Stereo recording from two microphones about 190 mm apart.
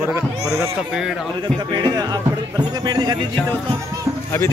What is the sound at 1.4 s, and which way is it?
Speech, 20° right (ahead or behind).